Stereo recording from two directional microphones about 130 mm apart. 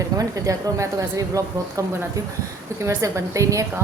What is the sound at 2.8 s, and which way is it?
Speech, 20° right (ahead or behind).